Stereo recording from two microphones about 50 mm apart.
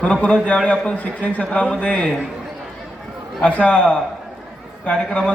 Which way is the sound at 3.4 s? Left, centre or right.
Left.